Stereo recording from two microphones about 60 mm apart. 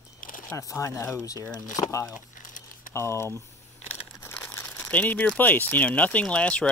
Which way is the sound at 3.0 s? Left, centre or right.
Left.